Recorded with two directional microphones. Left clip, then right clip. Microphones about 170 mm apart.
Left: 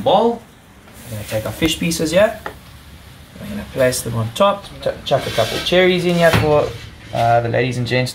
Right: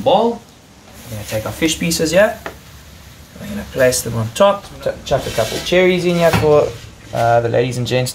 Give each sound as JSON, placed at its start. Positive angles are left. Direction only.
{"t": 0.1, "sound": "speech", "side_deg": 5}
{"t": 1.3, "sound": "speech", "side_deg": -5}
{"t": 3.7, "sound": "speech", "side_deg": -10}